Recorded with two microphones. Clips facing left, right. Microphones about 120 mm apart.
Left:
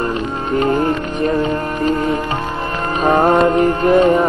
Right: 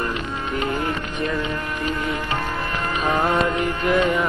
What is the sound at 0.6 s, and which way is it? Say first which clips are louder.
Speech: left 10 dB; 40° left (ahead or behind).